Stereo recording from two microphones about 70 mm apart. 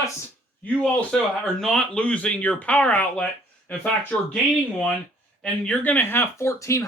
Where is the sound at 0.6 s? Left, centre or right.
Left.